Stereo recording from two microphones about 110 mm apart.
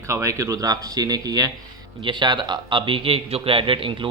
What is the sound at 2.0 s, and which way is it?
A man's voice, 45° right (ahead or behind).